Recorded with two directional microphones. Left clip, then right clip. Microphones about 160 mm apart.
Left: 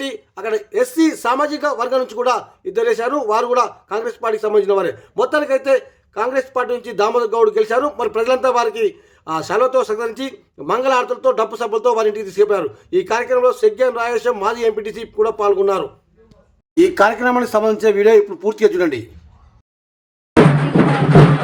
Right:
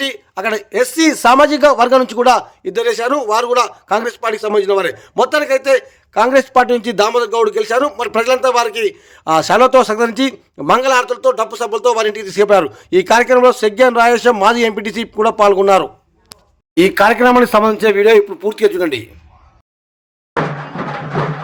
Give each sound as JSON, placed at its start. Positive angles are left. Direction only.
{"t": 0.0, "sound": "speech", "side_deg": -25}